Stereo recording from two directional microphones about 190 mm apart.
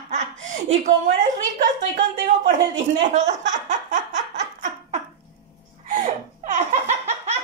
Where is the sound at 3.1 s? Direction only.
40° right (ahead or behind).